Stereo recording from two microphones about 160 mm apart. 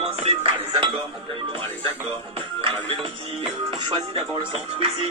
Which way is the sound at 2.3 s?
35° right (ahead or behind).